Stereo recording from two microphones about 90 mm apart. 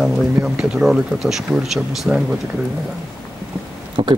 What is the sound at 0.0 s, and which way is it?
Speech, 10° right (ahead or behind).